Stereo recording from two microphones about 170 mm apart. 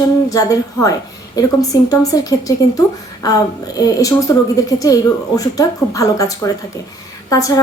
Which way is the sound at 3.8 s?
20° left (ahead or behind).